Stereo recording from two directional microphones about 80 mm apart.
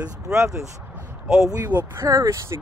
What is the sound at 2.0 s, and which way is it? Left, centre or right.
Speech, right.